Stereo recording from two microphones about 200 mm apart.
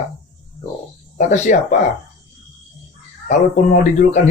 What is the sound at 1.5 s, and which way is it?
Speech, 45° left (ahead or behind).